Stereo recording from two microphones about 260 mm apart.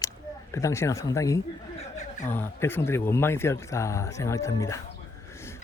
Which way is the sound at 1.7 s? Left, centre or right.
Left.